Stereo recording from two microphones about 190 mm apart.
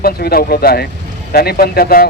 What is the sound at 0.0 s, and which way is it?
A man's voice, 55° left (ahead or behind).